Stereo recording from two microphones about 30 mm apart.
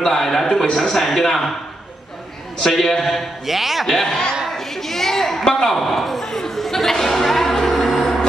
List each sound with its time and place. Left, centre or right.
0.0 s a man's voice: centre
2.7 s a man's voice: centre
3.4 s a man's voice: centre
3.8 s a man's voice: centre
4.1 s speech: left
4.6 s a sound: centre
5.4 s a man's voice: left
5.8 s a man's voice: centre
6.2 s a sound: centre
6.5 s music: centre
8.0 s a sound: left